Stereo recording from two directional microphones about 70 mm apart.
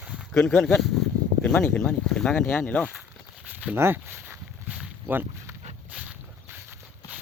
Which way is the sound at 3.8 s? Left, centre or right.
Right.